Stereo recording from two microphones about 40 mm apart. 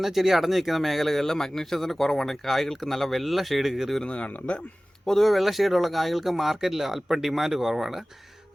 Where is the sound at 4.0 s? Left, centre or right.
Left.